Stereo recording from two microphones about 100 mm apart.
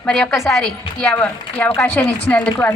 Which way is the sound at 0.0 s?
10° left (ahead or behind).